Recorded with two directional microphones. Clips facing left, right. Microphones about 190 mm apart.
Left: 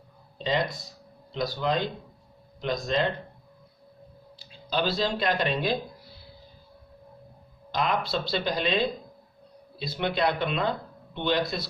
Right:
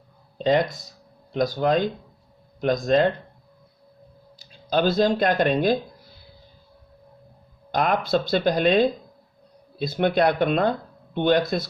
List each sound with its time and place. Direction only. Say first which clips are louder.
0.4 s speech: right 7 dB; 50° right (ahead or behind)
4.4 s speech: right 6 dB; 45° right (ahead or behind)
7.7 s speech: right 6 dB; 50° right (ahead or behind)